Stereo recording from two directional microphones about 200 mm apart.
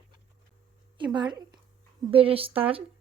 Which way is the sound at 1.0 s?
20° right (ahead or behind).